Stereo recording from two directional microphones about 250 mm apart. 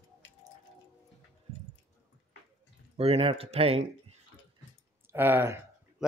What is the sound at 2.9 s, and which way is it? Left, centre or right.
Speech, right.